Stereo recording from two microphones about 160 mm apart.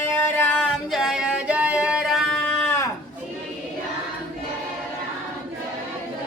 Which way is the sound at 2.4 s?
15° left (ahead or behind).